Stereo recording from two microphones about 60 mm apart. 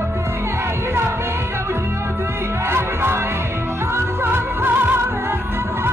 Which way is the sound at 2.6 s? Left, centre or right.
Right.